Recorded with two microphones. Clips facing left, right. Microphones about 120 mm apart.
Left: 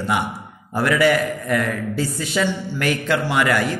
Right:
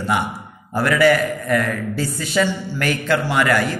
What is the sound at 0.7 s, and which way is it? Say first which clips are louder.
A man's voice: right 2 dB; 20° left (ahead or behind).